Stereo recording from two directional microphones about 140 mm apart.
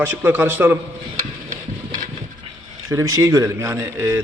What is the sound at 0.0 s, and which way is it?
Speech, 15° right (ahead or behind).